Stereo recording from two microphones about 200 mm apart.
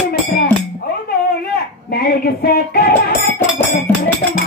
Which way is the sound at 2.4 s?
50° left (ahead or behind).